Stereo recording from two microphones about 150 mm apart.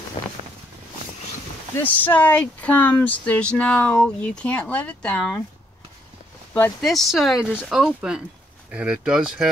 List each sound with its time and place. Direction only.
0.2 s a sound: 35° left (ahead or behind)
1.8 s speech: 10° left (ahead or behind)
6.8 s speech: centre (ahead or behind)